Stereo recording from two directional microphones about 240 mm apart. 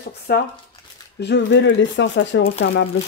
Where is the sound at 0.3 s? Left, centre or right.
Left.